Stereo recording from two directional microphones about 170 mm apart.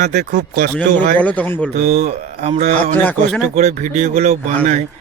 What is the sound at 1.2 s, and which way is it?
Speech, 10° left (ahead or behind).